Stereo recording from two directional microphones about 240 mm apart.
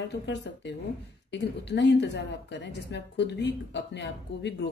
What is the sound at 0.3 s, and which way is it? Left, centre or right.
A woman's voice, left.